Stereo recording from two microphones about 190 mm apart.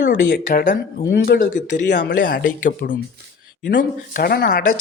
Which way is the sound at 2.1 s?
45° left (ahead or behind).